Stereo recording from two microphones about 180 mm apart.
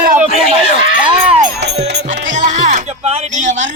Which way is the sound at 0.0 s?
50° right (ahead or behind).